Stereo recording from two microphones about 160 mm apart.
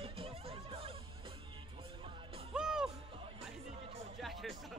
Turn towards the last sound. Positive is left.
turn(degrees=0)  # may be behind; listen again after turning